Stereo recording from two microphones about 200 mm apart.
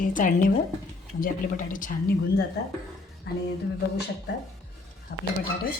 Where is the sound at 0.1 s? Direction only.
40° left (ahead or behind).